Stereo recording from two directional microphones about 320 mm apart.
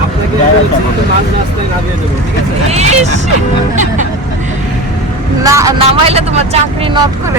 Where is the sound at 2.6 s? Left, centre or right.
Right.